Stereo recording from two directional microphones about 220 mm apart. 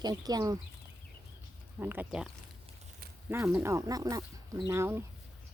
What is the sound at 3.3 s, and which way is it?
Speech, 10° right (ahead or behind).